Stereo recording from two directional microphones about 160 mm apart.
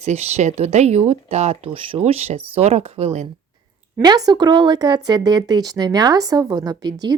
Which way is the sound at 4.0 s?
25° right (ahead or behind).